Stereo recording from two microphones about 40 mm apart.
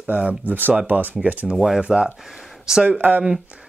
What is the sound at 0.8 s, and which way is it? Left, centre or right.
Speech, right.